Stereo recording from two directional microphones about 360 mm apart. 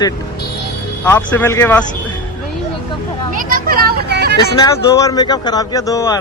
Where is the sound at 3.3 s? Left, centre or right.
Right.